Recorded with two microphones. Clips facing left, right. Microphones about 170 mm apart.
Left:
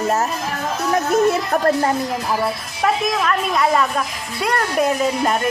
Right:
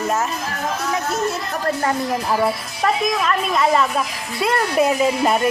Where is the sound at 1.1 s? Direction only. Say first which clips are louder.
Left 7 dB; 55° left (ahead or behind).